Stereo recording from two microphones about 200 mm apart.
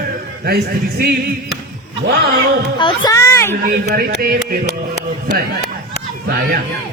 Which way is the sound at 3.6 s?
45° right (ahead or behind).